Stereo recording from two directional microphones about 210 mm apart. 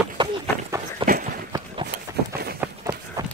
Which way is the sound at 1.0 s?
40° right (ahead or behind).